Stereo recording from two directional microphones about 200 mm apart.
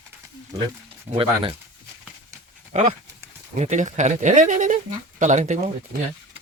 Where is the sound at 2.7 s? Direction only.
35° right (ahead or behind).